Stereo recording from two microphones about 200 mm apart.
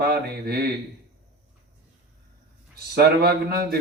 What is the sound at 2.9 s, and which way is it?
Speech, 55° right (ahead or behind).